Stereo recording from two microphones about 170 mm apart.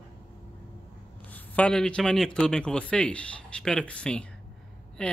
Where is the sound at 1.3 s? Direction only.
10° left (ahead or behind).